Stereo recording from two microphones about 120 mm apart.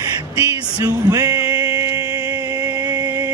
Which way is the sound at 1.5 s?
30° right (ahead or behind).